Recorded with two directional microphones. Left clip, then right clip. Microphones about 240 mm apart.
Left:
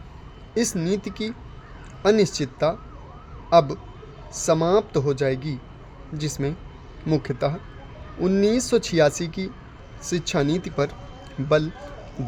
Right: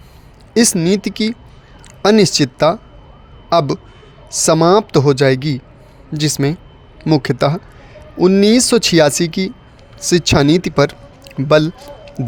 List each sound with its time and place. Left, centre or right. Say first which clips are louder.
0.5 s a man's voice: right 10 dB; right